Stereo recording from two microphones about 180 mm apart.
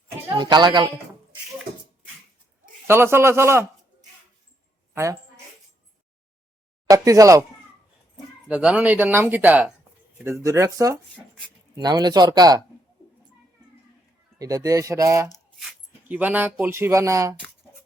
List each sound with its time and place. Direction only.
0.3 s a man's voice: 25° right (ahead or behind)
2.8 s speech: 15° right (ahead or behind)
6.8 s speech: 20° right (ahead or behind)
8.4 s speech: 5° right (ahead or behind)
11.1 s speech: centre (ahead or behind)
11.7 s speech: 20° right (ahead or behind)
14.3 s speech: 20° right (ahead or behind)
15.5 s speech: 5° right (ahead or behind)